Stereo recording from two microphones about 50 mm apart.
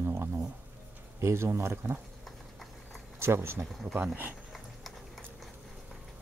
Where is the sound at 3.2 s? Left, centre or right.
Right.